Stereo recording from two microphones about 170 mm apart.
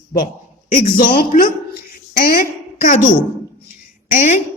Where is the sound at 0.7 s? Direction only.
60° left (ahead or behind).